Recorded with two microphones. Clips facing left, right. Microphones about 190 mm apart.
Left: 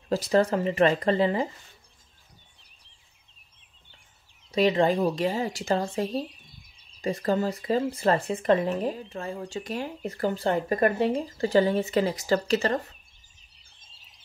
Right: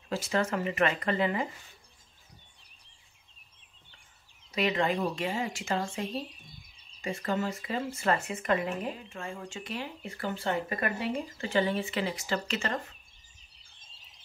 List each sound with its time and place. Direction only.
0.1 s speech: 35° left (ahead or behind)
4.5 s speech: 30° left (ahead or behind)